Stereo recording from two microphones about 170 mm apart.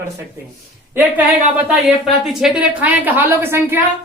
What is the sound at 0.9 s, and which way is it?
A woman's voice, 10° right (ahead or behind).